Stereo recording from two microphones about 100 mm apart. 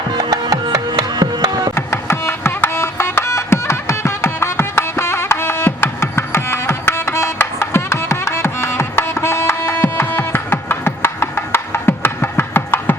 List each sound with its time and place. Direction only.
0.1 s music: 45° right (ahead or behind)
1.7 s music: 25° left (ahead or behind)